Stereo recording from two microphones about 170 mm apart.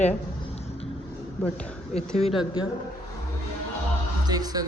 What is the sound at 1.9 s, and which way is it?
Speech, 35° left (ahead or behind).